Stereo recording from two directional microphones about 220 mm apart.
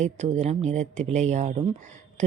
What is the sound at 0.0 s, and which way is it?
A woman's voice, 30° right (ahead or behind).